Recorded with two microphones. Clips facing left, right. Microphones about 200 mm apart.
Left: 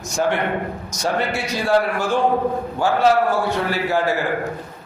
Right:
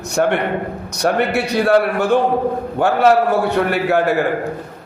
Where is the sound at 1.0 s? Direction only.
65° right (ahead or behind).